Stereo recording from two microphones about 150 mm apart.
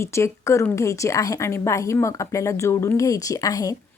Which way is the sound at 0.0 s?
20° left (ahead or behind).